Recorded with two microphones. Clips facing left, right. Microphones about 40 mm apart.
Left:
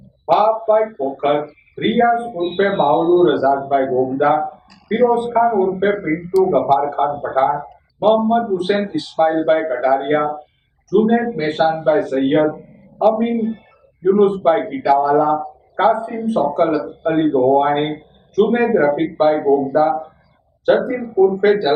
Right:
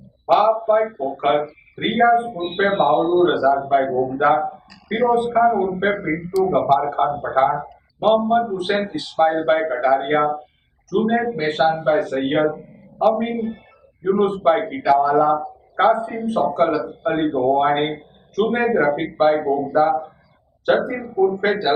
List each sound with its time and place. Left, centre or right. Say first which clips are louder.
0.3 s a man's voice: left 2 dB; centre
7.3 s a man's voice: left 1 dB; centre
11.9 s speech: left 3 dB; centre
12.2 s a man's voice: left 4 dB; centre